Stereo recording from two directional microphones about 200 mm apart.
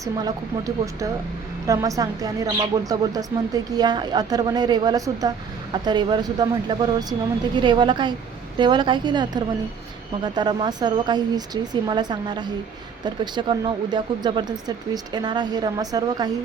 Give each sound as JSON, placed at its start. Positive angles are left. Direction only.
{"t": 0.0, "sound": "speech", "side_deg": -20}